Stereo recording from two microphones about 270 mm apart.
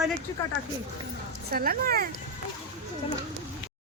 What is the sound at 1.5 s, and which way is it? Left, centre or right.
Speech, right.